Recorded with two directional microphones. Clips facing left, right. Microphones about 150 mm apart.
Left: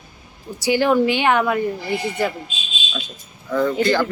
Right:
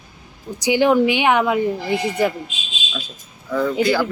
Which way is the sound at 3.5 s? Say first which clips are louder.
Even; 5° right (ahead or behind).